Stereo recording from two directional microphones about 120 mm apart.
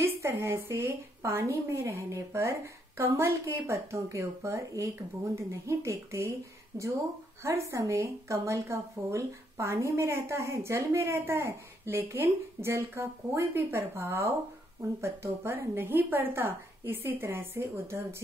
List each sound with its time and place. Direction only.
0.0 s speech: 20° right (ahead or behind)